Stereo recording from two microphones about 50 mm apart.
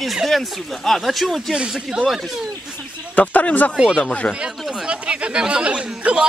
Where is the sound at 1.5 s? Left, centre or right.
Centre.